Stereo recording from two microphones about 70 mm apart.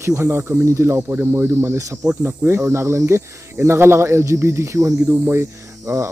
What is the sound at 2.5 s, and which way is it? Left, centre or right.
Speech, right.